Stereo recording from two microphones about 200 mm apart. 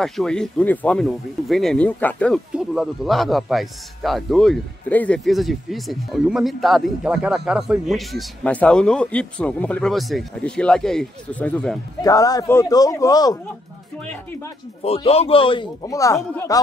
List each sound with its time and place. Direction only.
0.0 s speech: centre (ahead or behind)
12.0 s speech: 15° left (ahead or behind)
13.9 s speech: 5° left (ahead or behind)
14.8 s speech: 30° left (ahead or behind)